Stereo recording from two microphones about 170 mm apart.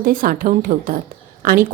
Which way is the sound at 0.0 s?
55° right (ahead or behind).